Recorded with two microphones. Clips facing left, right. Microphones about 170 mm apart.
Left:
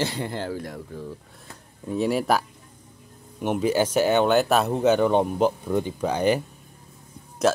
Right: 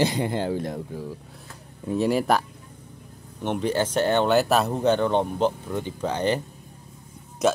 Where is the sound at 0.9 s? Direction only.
10° right (ahead or behind); by 6.4 s 10° left (ahead or behind).